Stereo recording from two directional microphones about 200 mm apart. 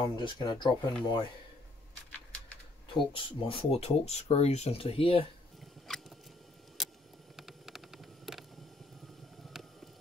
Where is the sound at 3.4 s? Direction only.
25° left (ahead or behind).